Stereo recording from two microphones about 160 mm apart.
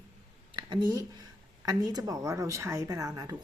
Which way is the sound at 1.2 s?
25° right (ahead or behind).